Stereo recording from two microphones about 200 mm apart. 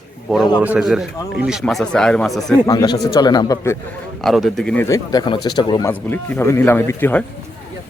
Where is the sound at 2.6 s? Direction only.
20° left (ahead or behind).